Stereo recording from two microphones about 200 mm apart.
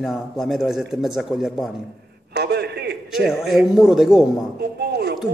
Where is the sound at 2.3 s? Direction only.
55° right (ahead or behind).